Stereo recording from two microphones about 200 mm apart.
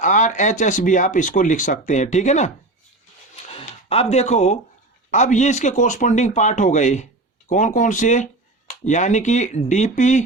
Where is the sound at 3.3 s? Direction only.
30° left (ahead or behind).